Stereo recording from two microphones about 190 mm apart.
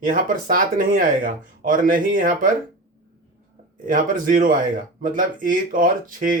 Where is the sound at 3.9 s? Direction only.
45° right (ahead or behind).